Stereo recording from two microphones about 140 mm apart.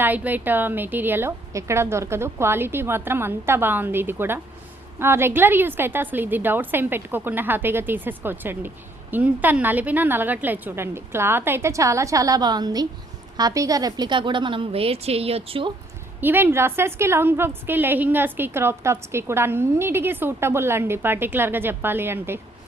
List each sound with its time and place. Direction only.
0.0 s a woman's voice: 15° right (ahead or behind); by 15.7 s 40° right (ahead or behind)
16.2 s a woman's voice: 15° right (ahead or behind)